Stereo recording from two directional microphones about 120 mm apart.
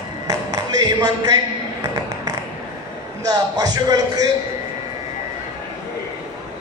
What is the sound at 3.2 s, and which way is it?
A man's voice, 35° right (ahead or behind).